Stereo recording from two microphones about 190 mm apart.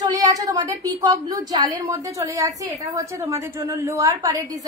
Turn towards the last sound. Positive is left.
turn(degrees=-20)  # may be behind; listen again after turning